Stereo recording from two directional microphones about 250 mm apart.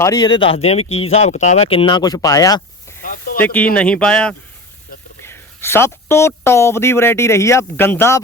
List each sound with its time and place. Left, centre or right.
0.0 s speech: centre
3.0 s a sound: left
3.4 s speech: centre